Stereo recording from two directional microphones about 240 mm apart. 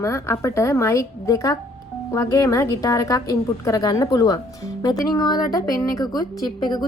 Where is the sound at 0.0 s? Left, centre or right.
Centre.